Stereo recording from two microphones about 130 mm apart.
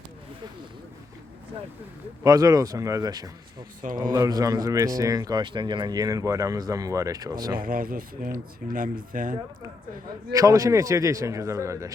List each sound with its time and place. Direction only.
2.2 s speech: 25° right (ahead or behind)
7.6 s speech: 90° right
10.3 s speech: 25° right (ahead or behind)